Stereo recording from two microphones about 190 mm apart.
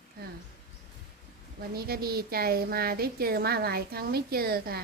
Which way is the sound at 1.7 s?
55° right (ahead or behind).